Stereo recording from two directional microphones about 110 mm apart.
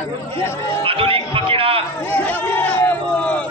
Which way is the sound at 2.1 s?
15° left (ahead or behind).